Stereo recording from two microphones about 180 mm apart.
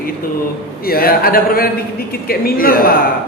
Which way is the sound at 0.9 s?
55° left (ahead or behind).